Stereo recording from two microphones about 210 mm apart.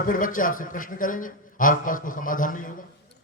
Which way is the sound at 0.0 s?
40° left (ahead or behind).